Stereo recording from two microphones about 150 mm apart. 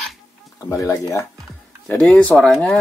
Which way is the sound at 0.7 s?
20° left (ahead or behind).